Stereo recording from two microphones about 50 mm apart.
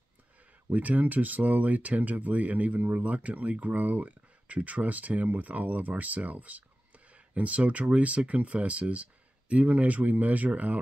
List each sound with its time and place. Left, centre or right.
0.7 s speech: right